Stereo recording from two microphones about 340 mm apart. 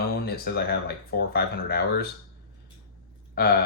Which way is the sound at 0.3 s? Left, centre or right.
Left.